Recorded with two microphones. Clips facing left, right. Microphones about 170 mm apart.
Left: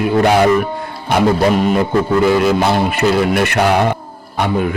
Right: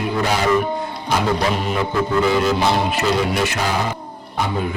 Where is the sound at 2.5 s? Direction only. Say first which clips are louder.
Left 4 dB; 55° left (ahead or behind).